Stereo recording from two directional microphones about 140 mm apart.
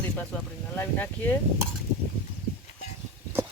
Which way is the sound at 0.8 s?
15° left (ahead or behind).